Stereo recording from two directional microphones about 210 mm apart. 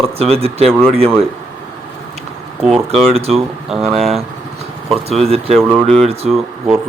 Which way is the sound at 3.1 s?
30° right (ahead or behind).